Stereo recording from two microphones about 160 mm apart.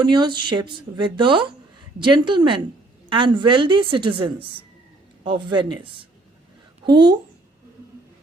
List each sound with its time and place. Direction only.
0.0 s a woman's voice: 30° right (ahead or behind)